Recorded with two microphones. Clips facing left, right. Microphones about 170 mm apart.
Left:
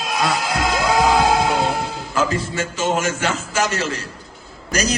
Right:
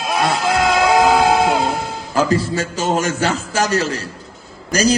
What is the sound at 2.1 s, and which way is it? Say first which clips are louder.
A man's voice: right 4 dB; 35° right (ahead or behind).